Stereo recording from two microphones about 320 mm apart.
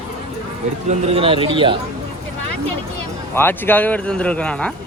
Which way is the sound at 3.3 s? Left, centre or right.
Centre.